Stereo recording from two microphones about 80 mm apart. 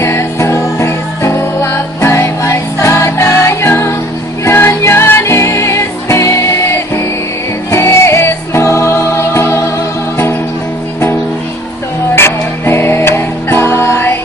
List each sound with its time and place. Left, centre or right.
0.0 s music: left
12.1 s music: left